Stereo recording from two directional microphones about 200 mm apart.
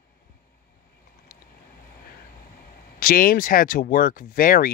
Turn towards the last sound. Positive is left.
turn(degrees=45)  # may be behind; listen again after turning